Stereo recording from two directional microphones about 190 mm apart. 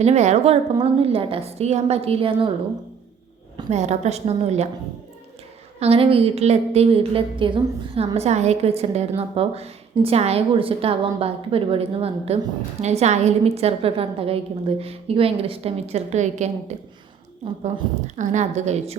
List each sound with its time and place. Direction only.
0.0 s a woman's voice: 35° right (ahead or behind)
3.7 s a woman's voice: 35° right (ahead or behind)
5.8 s a woman's voice: 30° right (ahead or behind)
18.2 s a woman's voice: 40° right (ahead or behind)